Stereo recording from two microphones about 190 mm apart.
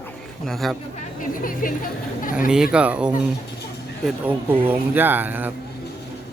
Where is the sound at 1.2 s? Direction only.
45° left (ahead or behind).